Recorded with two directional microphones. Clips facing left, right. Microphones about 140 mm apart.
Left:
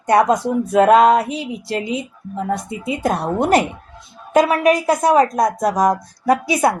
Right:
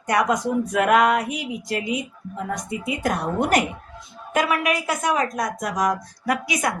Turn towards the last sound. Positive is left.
turn(degrees=35)  # may be behind; listen again after turning